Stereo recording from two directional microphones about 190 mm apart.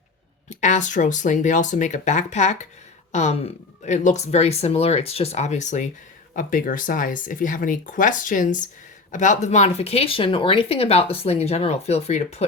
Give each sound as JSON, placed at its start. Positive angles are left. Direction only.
{"t": 0.6, "sound": "speech", "side_deg": 40}